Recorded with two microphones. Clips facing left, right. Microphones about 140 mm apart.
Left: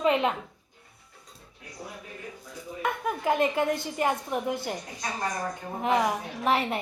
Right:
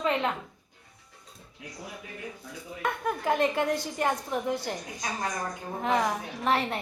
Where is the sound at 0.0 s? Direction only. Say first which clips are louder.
Left 4 dB; 15° left (ahead or behind).